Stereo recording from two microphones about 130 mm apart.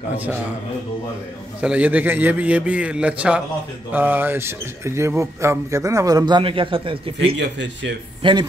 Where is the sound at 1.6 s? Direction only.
10° right (ahead or behind).